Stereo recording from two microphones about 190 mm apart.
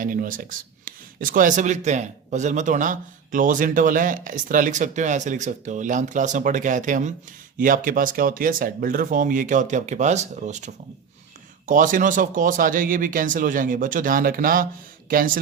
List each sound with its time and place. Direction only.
0.0 s a man's voice: 45° right (ahead or behind)